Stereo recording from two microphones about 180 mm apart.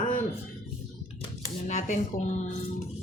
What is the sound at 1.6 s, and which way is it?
Speech, 40° left (ahead or behind).